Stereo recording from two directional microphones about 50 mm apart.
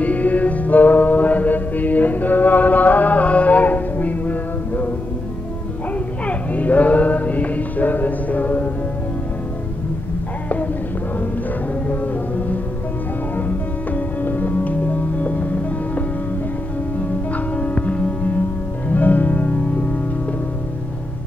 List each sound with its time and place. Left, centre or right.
0.0 s music: left
6.2 s music: left
11.9 s music: left
13.9 s music: left
17.3 s music: left